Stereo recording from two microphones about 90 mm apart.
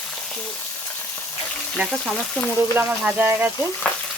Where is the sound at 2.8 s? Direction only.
15° right (ahead or behind).